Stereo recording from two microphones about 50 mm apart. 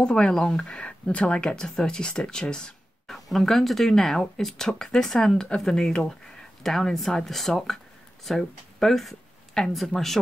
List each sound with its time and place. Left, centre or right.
0.0 s speech: centre
3.1 s speech: centre